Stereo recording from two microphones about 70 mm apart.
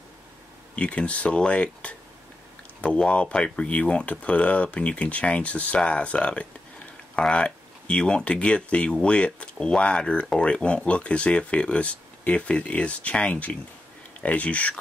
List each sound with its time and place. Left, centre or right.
0.7 s speech: centre